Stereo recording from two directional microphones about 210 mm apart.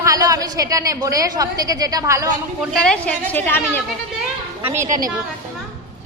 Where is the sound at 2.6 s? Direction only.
5° left (ahead or behind).